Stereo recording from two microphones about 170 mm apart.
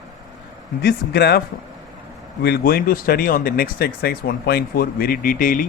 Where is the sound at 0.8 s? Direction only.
70° left (ahead or behind).